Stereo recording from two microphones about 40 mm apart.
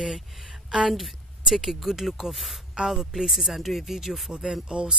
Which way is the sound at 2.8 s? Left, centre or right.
Centre.